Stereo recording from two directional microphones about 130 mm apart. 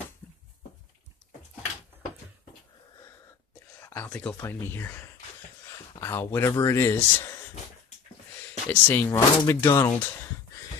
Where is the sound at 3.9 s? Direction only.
15° left (ahead or behind).